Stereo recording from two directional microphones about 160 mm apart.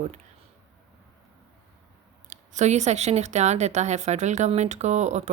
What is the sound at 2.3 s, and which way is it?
Speech, 50° right (ahead or behind).